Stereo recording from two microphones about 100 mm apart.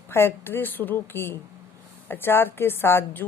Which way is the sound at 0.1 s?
25° left (ahead or behind).